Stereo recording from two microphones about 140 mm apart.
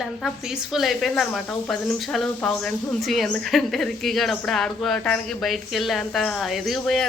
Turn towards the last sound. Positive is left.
turn(degrees=0)  # may be behind; listen again after turning